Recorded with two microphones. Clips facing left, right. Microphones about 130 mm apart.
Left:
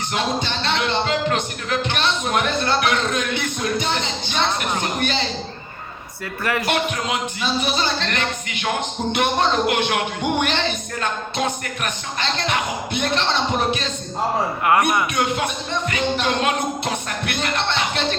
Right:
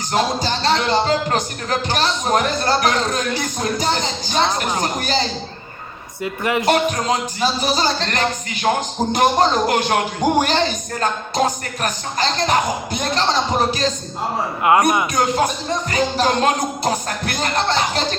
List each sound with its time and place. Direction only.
0.1 s speech: 35° right (ahead or behind)
6.2 s speech: 20° right (ahead or behind)
6.7 s speech: 35° right (ahead or behind)
14.7 s speech: 20° right (ahead or behind)
15.1 s speech: 35° right (ahead or behind)